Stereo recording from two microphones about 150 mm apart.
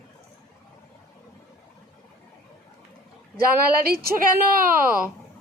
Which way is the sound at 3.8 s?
90° right.